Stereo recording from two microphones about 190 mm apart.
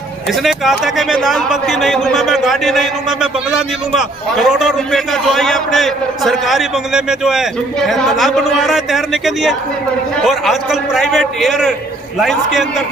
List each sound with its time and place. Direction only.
0.3 s speech: centre (ahead or behind)